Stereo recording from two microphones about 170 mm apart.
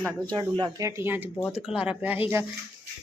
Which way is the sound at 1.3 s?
15° left (ahead or behind).